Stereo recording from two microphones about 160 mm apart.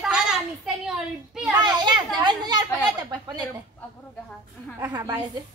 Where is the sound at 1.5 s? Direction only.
25° right (ahead or behind).